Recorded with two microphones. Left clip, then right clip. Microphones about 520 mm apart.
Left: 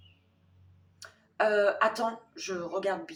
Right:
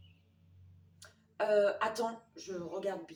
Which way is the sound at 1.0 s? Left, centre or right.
Right.